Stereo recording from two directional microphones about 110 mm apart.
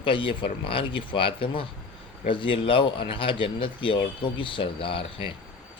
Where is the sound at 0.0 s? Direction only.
50° left (ahead or behind).